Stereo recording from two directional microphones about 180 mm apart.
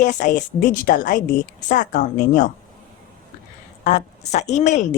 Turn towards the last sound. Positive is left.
turn(degrees=40)  # may be behind; listen again after turning